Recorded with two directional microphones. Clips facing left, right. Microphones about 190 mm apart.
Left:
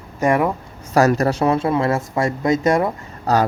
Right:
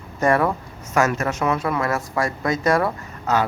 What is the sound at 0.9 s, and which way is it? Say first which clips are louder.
Speech: left 5 dB; 35° left (ahead or behind).